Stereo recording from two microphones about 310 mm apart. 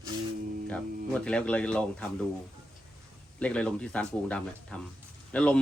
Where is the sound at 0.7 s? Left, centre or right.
Centre.